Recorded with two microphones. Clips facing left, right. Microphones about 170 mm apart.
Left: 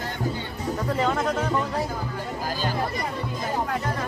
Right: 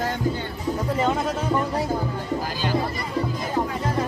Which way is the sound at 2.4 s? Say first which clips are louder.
Right 1 dB; 45° left (ahead or behind).